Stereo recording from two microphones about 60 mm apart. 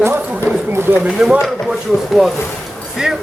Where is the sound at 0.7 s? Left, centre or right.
Right.